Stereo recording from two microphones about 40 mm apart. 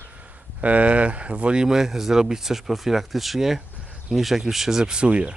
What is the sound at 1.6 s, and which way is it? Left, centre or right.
Speech, centre.